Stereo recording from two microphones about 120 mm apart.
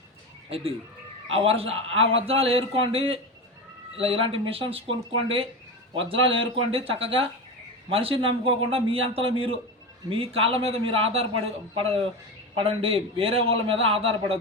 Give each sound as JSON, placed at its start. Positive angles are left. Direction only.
{"t": 1.3, "sound": "a man's voice", "side_deg": -50}